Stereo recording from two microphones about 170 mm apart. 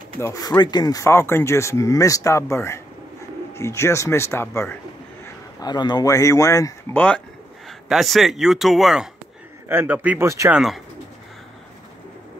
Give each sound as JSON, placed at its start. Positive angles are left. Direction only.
{"t": 0.2, "sound": "a man's voice", "side_deg": 20}
{"t": 10.5, "sound": "speech", "side_deg": 0}